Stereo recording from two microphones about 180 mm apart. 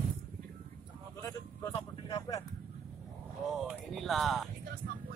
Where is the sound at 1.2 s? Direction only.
20° left (ahead or behind).